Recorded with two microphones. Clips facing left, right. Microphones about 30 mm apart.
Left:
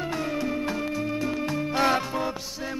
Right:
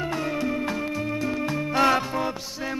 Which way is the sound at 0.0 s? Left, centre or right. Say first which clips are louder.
Right 1 dB; centre.